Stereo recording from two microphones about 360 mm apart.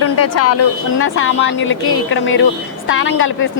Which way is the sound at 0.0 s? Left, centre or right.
Left.